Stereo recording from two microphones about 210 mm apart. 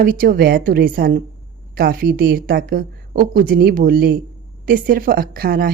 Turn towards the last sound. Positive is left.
turn(degrees=-45)  # may be behind; listen again after turning